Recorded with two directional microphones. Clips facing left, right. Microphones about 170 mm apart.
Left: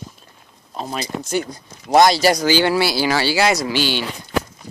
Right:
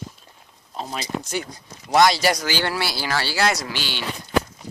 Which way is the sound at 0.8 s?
50° left (ahead or behind).